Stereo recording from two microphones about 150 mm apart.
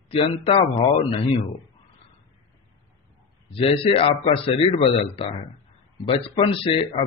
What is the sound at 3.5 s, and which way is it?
A man's voice, 40° left (ahead or behind).